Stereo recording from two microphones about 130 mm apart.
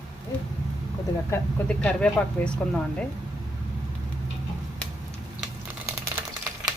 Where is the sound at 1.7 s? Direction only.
10° left (ahead or behind).